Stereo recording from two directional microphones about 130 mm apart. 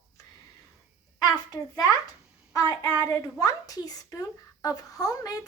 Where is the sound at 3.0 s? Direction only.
25° left (ahead or behind).